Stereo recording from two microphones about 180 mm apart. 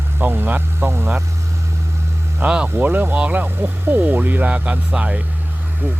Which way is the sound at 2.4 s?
5° right (ahead or behind).